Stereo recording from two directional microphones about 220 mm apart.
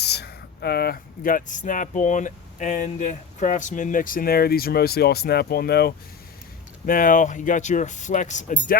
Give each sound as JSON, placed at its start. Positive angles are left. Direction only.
{"t": 0.0, "sound": "speech", "side_deg": 50}